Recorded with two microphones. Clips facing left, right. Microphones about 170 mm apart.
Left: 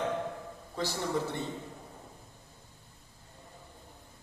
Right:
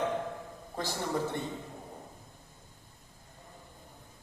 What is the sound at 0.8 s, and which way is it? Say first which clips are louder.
Speech: left 2 dB; 45° right (ahead or behind).